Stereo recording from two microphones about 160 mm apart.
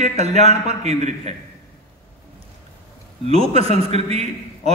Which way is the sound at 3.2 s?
40° right (ahead or behind).